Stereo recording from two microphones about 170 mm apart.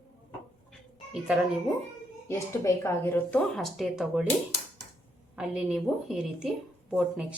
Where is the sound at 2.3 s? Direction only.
15° left (ahead or behind).